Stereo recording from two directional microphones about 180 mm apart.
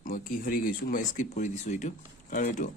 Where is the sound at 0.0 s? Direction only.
50° left (ahead or behind).